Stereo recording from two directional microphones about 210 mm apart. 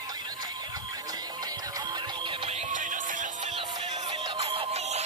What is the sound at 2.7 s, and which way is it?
Music, 35° right (ahead or behind).